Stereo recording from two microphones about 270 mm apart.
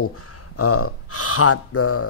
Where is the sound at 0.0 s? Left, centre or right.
Left.